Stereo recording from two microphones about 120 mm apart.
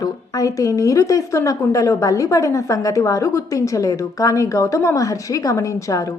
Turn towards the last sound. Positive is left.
turn(degrees=30)  # may be behind; listen again after turning